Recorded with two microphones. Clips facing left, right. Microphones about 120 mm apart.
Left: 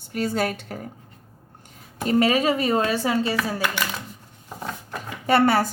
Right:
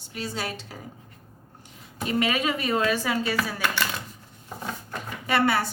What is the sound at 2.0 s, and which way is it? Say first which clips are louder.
A woman's voice: left 6 dB; 35° left (ahead or behind).